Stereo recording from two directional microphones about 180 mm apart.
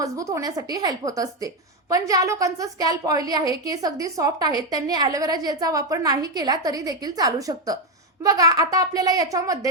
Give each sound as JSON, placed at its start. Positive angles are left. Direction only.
{"t": 0.0, "sound": "a woman's voice", "side_deg": -20}